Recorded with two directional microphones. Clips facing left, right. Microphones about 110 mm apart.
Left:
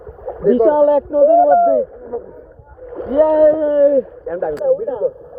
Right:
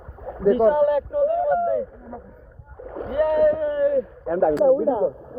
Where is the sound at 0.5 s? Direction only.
25° left (ahead or behind).